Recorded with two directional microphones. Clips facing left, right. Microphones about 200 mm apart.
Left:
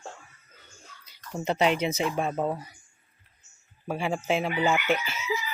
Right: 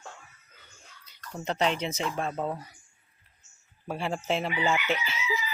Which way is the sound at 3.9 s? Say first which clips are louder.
Left 3 dB; centre (ahead or behind).